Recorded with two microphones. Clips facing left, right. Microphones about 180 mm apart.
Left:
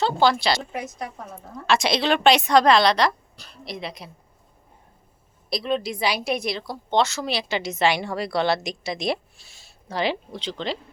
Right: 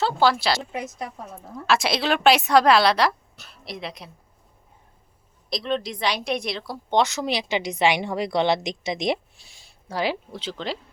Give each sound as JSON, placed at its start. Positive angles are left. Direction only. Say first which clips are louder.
{"t": 0.2, "sound": "a woman's voice", "louder": "even", "side_deg": -5}
{"t": 5.5, "sound": "a woman's voice", "louder": "left 1 dB", "side_deg": 5}
{"t": 6.9, "sound": "a woman's voice", "louder": "right 1 dB", "side_deg": -15}